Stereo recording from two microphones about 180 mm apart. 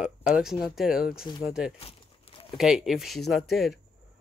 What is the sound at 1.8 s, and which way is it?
Crumpling, 30° left (ahead or behind).